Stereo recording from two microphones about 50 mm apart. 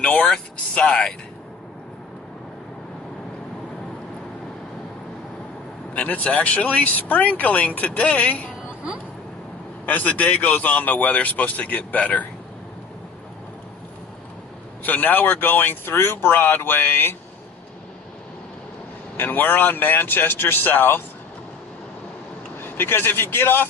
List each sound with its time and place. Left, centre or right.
0.0 s a sound: left
0.7 s speech: left
5.9 s speech: left
6.8 s speech: left
9.8 s speech: left
14.8 s a man's voice: left
19.2 s speech: left
22.6 s a man's voice: left